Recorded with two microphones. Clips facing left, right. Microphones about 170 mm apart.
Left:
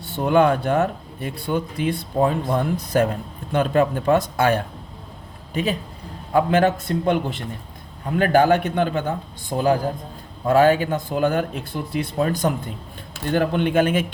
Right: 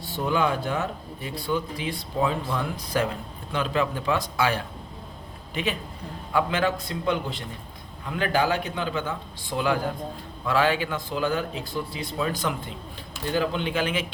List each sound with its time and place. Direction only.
0.3 s speech: 55° left (ahead or behind)
6.3 s speech: 50° left (ahead or behind)
13.3 s speech: 55° left (ahead or behind)